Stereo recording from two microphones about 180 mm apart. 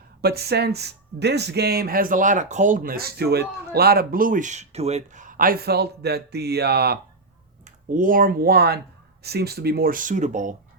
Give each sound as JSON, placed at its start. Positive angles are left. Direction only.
{"t": 0.2, "sound": "speech", "side_deg": -60}
{"t": 7.6, "sound": "speech", "side_deg": -50}